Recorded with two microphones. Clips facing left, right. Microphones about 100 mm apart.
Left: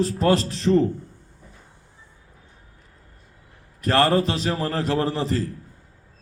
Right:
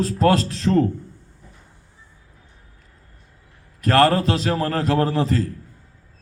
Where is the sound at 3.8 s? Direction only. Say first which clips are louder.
Right 3 dB; 35° right (ahead or behind).